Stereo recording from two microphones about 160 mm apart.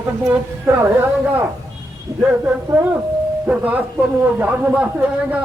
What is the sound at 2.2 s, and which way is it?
A man's voice, 10° right (ahead or behind).